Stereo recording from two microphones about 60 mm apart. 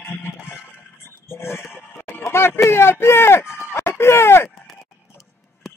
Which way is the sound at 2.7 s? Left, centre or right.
Left.